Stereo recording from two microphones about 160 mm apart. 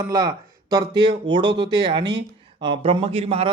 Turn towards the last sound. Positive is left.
turn(degrees=-35)  # may be behind; listen again after turning